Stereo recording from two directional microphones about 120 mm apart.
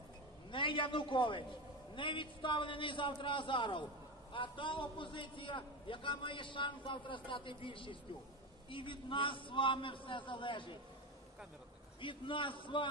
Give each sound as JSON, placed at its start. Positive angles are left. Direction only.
{"t": 0.5, "sound": "a man's voice", "side_deg": 45}
{"t": 12.0, "sound": "a man's voice", "side_deg": 45}